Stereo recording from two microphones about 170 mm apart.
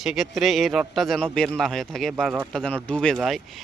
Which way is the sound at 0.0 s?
Centre (ahead or behind).